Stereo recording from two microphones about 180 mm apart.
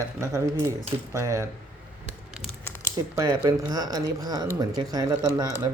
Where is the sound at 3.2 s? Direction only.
20° right (ahead or behind).